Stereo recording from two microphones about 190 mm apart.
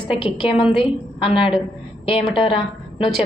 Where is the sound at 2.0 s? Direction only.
25° left (ahead or behind).